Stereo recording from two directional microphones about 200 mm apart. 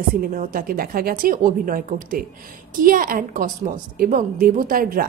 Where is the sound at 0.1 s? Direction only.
45° right (ahead or behind).